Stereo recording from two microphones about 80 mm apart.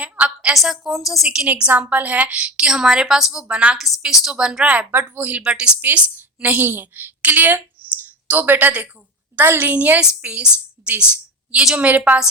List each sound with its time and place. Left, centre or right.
0.0 s a sound: centre
0.5 s a woman's voice: centre
1.5 s a woman's voice: centre
3.8 s a woman's voice: centre; by 5.4 s right
5.4 s a woman's voice: centre